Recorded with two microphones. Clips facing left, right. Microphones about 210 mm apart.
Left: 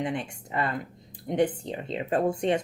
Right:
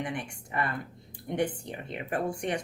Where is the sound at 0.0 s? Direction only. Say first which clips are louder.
Left 4 dB; 20° left (ahead or behind).